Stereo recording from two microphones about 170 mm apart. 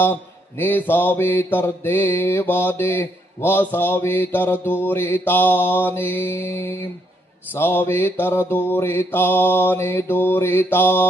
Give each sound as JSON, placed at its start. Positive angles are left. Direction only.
{"t": 0.0, "sound": "mantra", "side_deg": 10}